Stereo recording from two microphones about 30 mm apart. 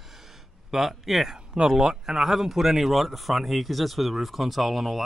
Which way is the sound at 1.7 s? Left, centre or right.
Right.